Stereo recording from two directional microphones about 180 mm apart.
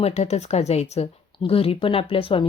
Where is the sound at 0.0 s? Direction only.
35° left (ahead or behind).